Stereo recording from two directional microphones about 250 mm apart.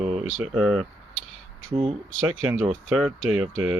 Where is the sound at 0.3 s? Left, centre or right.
Centre.